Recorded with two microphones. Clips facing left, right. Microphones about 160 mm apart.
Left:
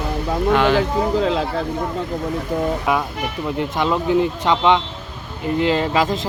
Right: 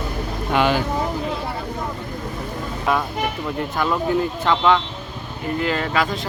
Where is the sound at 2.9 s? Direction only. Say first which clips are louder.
Even; 15° left (ahead or behind).